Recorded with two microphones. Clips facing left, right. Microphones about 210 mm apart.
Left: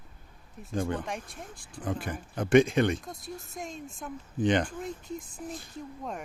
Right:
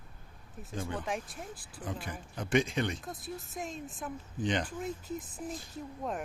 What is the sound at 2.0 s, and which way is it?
Speech, 55° left (ahead or behind).